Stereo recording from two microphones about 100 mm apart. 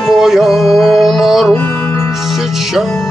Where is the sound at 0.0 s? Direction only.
Centre (ahead or behind).